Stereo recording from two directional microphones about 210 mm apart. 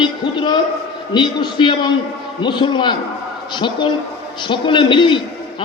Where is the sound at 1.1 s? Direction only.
20° left (ahead or behind).